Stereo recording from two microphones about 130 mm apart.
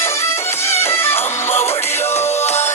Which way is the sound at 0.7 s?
20° left (ahead or behind).